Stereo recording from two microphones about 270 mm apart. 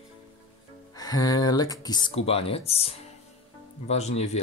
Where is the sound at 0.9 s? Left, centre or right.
Centre.